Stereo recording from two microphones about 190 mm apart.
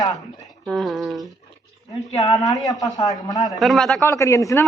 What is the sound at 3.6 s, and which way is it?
Speech, centre (ahead or behind).